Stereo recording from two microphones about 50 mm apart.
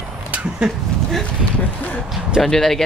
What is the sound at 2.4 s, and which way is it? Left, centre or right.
Speech, centre.